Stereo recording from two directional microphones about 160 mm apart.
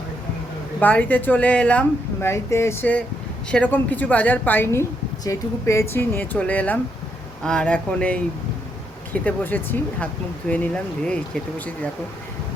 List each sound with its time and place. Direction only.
0.8 s speech: 10° left (ahead or behind)
9.2 s speech: 10° left (ahead or behind)